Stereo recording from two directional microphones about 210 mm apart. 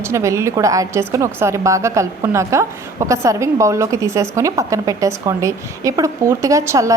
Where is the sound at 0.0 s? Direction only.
15° right (ahead or behind).